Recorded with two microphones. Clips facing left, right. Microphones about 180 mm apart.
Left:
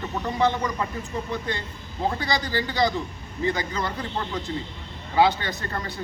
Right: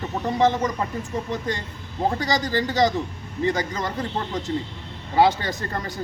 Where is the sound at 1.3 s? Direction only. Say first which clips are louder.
Right 2 dB; 45° right (ahead or behind).